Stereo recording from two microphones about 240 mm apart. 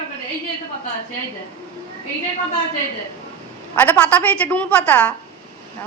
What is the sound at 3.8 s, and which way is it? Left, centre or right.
A woman's voice, centre.